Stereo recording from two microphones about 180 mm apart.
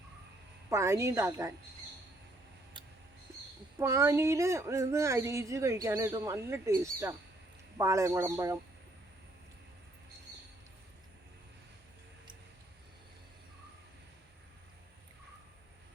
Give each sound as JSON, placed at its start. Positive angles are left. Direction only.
{"t": 0.7, "sound": "speech", "side_deg": -15}
{"t": 2.8, "sound": "a sound", "side_deg": -25}
{"t": 3.8, "sound": "speech", "side_deg": -15}